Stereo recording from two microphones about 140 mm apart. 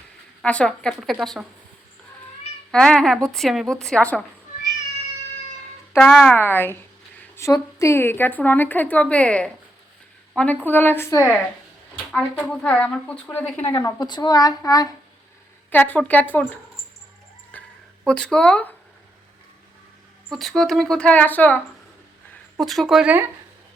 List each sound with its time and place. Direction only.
0.4 s a woman's voice: 10° left (ahead or behind)
2.7 s a woman's voice: 5° left (ahead or behind)
6.0 s a woman's voice: 5° left (ahead or behind)
12.1 s a woman's voice: 5° left (ahead or behind)
13.8 s a woman's voice: 30° left (ahead or behind)
15.7 s a woman's voice: 10° left (ahead or behind)
17.5 s a sound: 10° left (ahead or behind)
18.0 s a woman's voice: 5° left (ahead or behind)
20.3 s a woman's voice: centre (ahead or behind)
22.5 s a woman's voice: centre (ahead or behind)